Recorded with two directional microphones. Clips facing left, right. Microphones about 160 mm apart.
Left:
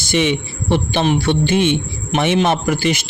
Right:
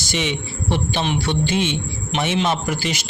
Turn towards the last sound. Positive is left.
turn(degrees=55)  # may be behind; listen again after turning